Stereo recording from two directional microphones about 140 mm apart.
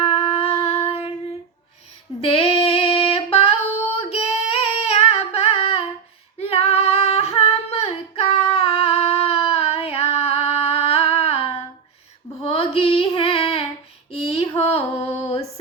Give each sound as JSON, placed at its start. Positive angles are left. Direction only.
{"t": 0.0, "sound": "child singing", "side_deg": 45}
{"t": 2.2, "sound": "female singing", "side_deg": 40}
{"t": 12.4, "sound": "a sound", "side_deg": 40}
{"t": 14.1, "sound": "female singing", "side_deg": 45}